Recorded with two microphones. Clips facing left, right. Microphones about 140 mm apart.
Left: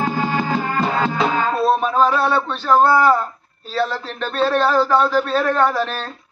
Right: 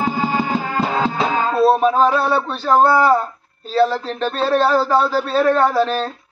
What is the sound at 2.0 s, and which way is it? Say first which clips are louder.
Speech: right 1 dB; 35° right (ahead or behind).